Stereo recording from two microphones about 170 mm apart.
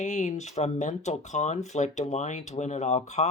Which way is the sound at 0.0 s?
45° left (ahead or behind).